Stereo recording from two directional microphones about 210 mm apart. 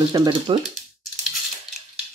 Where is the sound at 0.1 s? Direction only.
20° right (ahead or behind).